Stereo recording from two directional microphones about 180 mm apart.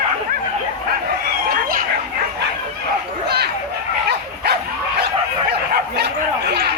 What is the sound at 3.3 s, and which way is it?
Children playing, 65° right (ahead or behind).